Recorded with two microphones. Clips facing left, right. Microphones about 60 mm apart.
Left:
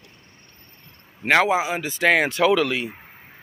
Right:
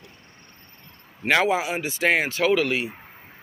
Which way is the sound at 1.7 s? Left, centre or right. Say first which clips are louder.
Left 3 dB; left.